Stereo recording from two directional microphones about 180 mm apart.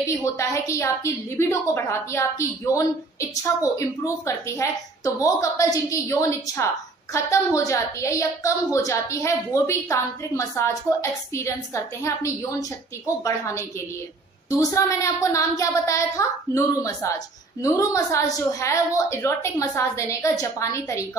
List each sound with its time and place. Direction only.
0.2 s a woman's voice: 15° left (ahead or behind)